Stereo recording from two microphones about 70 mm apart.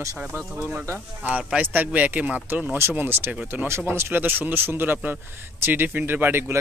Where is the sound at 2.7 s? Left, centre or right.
Right.